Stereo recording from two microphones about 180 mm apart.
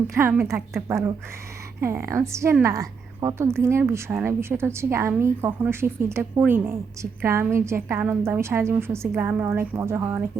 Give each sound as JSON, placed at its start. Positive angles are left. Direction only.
{"t": 0.1, "sound": "a woman's voice", "side_deg": -15}